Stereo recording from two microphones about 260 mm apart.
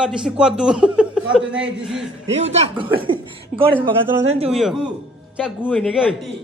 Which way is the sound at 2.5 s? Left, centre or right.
Centre.